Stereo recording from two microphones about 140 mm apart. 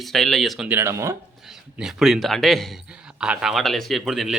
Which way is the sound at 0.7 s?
20° right (ahead or behind).